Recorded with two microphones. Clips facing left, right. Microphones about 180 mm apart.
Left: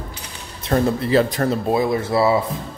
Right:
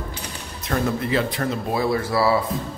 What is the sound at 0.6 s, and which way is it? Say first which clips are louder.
Speech: left 4 dB; 30° left (ahead or behind).